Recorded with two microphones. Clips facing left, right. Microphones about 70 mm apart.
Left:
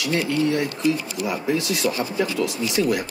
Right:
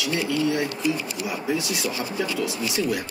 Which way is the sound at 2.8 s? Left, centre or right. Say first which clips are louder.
Left 5 dB; left.